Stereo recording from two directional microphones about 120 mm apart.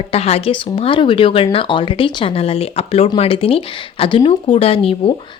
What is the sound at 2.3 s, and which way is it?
A woman's voice, 55° left (ahead or behind).